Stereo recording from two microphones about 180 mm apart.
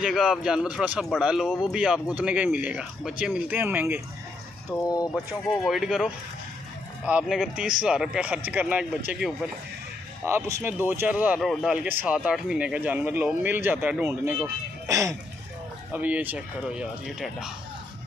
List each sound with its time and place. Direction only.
0.0 s speech: centre (ahead or behind)
4.6 s speech: 20° left (ahead or behind)
5.1 s speech: centre (ahead or behind)